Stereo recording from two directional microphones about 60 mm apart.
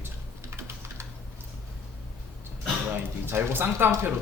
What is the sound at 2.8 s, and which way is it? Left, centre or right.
Speech, right.